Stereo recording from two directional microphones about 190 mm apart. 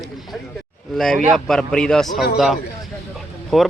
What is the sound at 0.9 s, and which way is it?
Speech, centre (ahead or behind).